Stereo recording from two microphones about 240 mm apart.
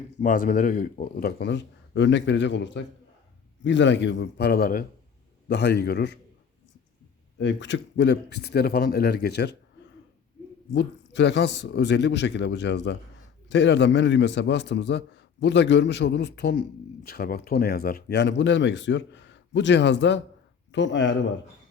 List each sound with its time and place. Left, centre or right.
0.2 s speech: left
7.3 s speech: left
10.7 s speech: left